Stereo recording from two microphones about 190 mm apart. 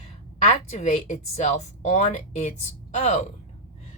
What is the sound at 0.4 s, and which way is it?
Speech, 35° left (ahead or behind).